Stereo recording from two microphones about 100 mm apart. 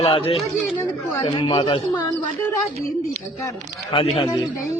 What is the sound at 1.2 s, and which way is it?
Speech, 50° left (ahead or behind).